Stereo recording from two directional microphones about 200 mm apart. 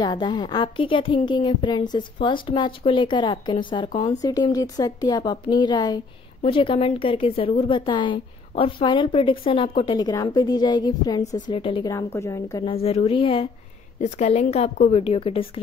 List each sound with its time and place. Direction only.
0.0 s a woman's voice: 20° left (ahead or behind)
12.6 s a woman's voice: 30° left (ahead or behind)
14.0 s a woman's voice: 35° left (ahead or behind)